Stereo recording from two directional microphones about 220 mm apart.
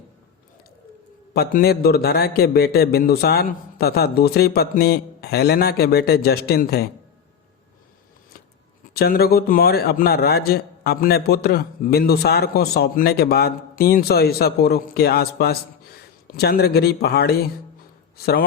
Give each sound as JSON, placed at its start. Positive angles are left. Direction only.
{"t": 1.3, "sound": "a man's voice", "side_deg": 45}
{"t": 8.9, "sound": "a man's voice", "side_deg": 45}